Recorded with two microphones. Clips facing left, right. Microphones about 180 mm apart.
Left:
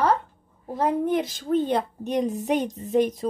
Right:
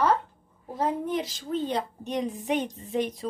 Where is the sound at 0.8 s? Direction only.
55° left (ahead or behind).